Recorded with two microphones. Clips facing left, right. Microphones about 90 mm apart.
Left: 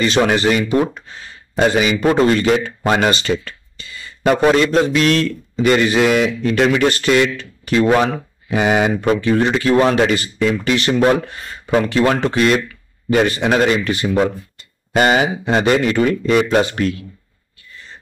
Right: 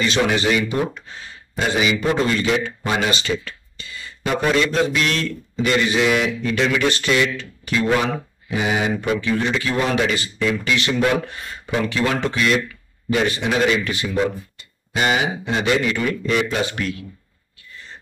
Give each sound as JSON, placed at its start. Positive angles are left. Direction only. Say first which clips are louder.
{"t": 0.0, "sound": "speech", "louder": "left 4 dB", "side_deg": 45}